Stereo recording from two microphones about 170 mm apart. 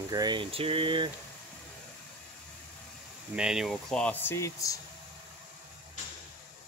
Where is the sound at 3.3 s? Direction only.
5° right (ahead or behind); by 4.8 s 20° left (ahead or behind).